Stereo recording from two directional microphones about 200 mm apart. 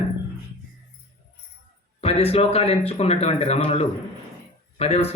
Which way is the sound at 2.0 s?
30° left (ahead or behind).